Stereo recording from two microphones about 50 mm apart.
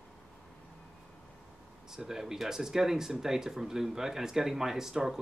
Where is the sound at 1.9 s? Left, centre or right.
Centre.